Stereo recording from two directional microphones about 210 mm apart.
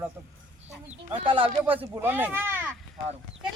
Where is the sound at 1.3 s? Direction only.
25° right (ahead or behind).